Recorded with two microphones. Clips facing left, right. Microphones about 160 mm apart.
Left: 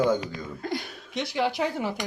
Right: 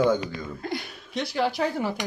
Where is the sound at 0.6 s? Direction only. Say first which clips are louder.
Left 3 dB; 45° left (ahead or behind).